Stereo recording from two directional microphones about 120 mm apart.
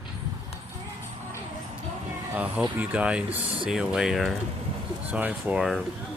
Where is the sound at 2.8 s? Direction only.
10° right (ahead or behind).